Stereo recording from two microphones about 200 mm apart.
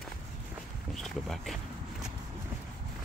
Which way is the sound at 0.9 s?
Centre (ahead or behind).